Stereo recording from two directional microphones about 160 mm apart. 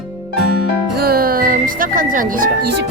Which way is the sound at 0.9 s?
70° right (ahead or behind).